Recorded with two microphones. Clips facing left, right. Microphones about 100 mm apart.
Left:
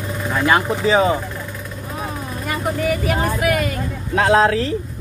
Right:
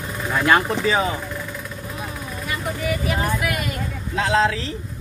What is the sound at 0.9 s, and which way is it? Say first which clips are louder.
Speech: left 7 dB; 25° left (ahead or behind).